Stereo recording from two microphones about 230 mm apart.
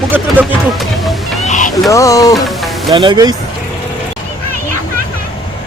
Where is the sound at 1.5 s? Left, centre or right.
Left.